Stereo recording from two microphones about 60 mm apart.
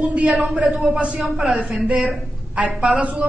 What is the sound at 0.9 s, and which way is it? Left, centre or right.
Speech, centre.